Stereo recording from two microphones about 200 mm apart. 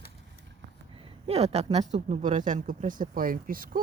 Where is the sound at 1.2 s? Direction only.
30° right (ahead or behind).